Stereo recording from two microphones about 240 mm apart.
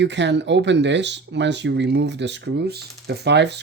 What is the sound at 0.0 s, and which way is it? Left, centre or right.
Speech, right.